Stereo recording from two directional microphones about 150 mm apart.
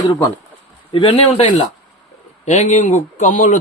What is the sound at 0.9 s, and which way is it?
Speech, 35° left (ahead or behind).